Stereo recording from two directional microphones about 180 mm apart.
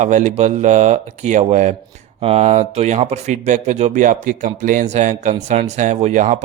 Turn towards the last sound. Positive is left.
turn(degrees=-45)  # may be behind; listen again after turning